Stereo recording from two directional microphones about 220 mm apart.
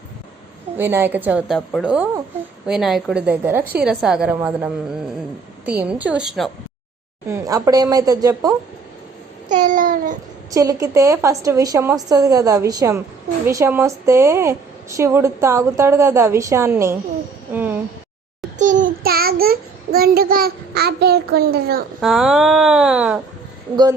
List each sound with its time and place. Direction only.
0.8 s a woman's voice: 10° right (ahead or behind)
7.3 s a woman's voice: 15° right (ahead or behind)
9.5 s babbling: 35° right (ahead or behind)
10.5 s a woman's voice: 15° right (ahead or behind)
18.6 s child singing: 35° right (ahead or behind)
22.0 s speech: centre (ahead or behind)